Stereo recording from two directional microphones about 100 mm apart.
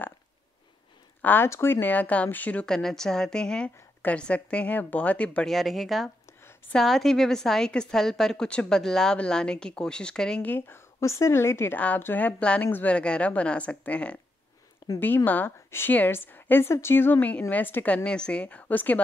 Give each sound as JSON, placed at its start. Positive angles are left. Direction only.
{"t": 1.2, "sound": "a woman's voice", "side_deg": 20}
{"t": 2.6, "sound": "a woman's voice", "side_deg": 5}
{"t": 5.5, "sound": "a woman's voice", "side_deg": 0}
{"t": 10.5, "sound": "a woman's voice", "side_deg": 25}